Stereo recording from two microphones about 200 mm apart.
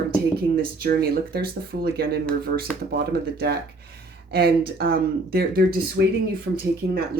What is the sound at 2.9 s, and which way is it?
Speech, 55° right (ahead or behind).